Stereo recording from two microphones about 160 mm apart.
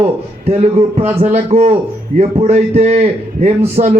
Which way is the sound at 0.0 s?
40° right (ahead or behind).